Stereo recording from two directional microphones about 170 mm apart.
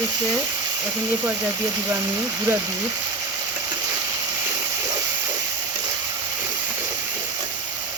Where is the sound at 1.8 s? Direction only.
15° right (ahead or behind).